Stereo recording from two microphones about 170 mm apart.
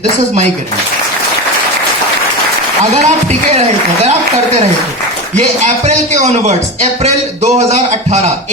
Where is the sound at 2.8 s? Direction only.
40° right (ahead or behind).